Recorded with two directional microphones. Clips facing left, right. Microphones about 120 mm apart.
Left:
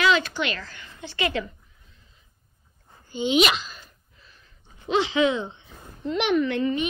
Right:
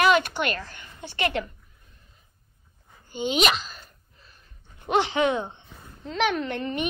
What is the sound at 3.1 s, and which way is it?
Speech, 45° right (ahead or behind).